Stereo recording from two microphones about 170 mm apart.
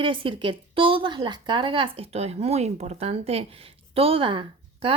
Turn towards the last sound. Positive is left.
turn(degrees=-30)  # may be behind; listen again after turning